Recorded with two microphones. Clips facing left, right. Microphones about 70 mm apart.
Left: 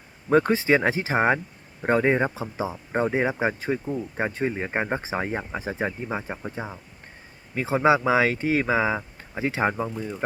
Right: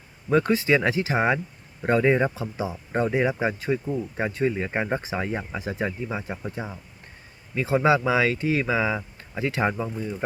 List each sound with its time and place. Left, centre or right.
0.3 s speech: left